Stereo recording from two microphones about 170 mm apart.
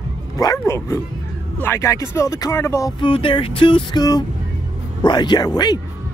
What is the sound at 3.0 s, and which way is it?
Speech, 30° left (ahead or behind).